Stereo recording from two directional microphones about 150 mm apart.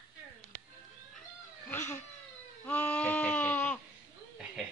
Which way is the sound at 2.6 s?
10° left (ahead or behind).